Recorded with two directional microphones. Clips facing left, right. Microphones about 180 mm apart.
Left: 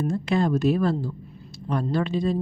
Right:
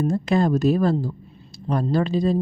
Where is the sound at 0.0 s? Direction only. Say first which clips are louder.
Right 3 dB; 40° right (ahead or behind).